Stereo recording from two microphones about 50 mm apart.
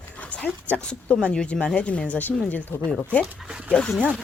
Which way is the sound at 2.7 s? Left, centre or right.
Left.